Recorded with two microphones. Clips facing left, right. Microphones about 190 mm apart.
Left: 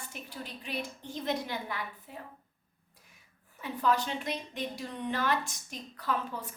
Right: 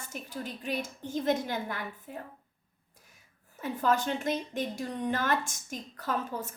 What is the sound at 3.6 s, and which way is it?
A woman's voice, 45° right (ahead or behind).